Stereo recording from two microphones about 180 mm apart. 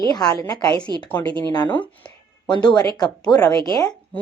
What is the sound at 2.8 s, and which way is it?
Speech, 20° left (ahead or behind).